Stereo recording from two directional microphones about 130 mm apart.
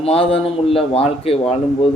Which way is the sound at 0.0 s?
50° left (ahead or behind).